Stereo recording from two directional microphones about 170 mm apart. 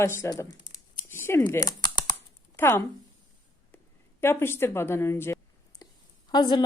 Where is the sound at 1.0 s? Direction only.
15° left (ahead or behind).